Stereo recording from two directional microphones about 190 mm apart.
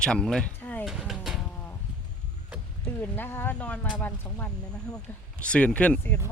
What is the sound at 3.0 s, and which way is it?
Speech, 10° left (ahead or behind).